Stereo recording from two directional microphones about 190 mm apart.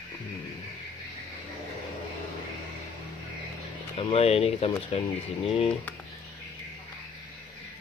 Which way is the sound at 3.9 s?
30° left (ahead or behind).